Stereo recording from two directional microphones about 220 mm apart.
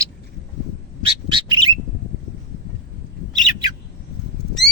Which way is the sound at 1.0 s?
20° right (ahead or behind).